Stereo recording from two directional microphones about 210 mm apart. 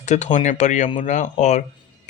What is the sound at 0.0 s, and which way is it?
Speech, 35° left (ahead or behind).